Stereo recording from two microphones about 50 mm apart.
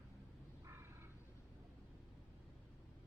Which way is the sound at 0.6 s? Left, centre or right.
Right.